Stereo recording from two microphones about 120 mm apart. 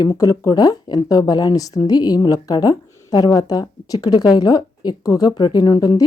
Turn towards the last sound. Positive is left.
turn(degrees=35)  # may be behind; listen again after turning